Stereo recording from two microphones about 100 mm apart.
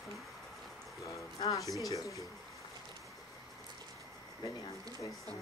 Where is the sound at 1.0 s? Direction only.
30° left (ahead or behind).